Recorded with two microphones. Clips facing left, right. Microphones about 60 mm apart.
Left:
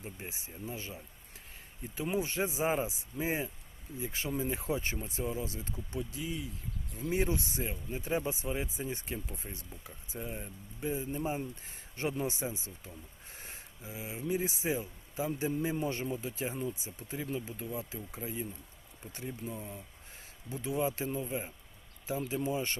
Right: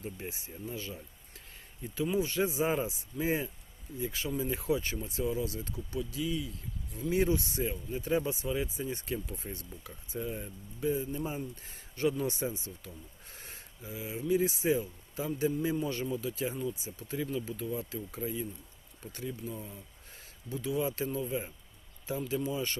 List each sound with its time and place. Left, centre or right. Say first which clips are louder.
0.0 s speech: right 3 dB; left
22.4 s speech: even; left